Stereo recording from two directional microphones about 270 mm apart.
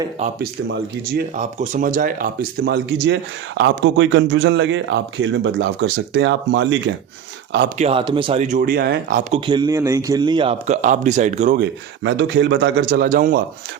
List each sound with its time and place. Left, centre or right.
1.1 s speech: right
7.8 s speech: right
9.5 s speech: centre; by 13.4 s right